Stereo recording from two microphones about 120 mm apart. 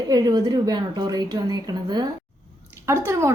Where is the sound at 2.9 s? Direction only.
25° right (ahead or behind).